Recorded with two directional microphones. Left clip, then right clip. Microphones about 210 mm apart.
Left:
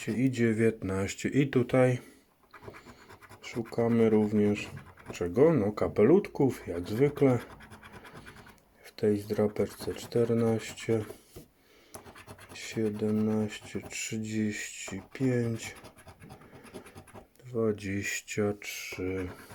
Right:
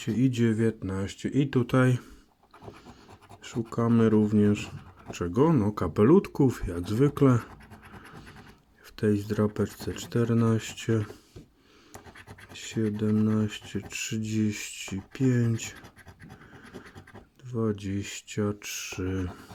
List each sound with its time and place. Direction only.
0.0 s speech: 25° right (ahead or behind)
0.6 s speech: 5° right (ahead or behind)
1.5 s speech: 25° right (ahead or behind)
3.4 s speech: 25° right (ahead or behind)
9.0 s speech: 25° right (ahead or behind)
12.5 s speech: 25° right (ahead or behind)
17.6 s speech: 15° right (ahead or behind)
18.6 s speech: 30° right (ahead or behind)